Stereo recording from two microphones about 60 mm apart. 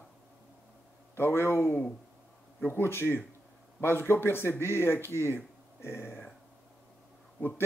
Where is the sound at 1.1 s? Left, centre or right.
Left.